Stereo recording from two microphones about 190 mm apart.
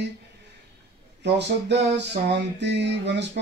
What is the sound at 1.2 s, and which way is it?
Music, 65° right (ahead or behind).